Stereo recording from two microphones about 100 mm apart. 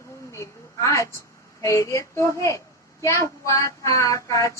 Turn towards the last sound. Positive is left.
turn(degrees=35)  # may be behind; listen again after turning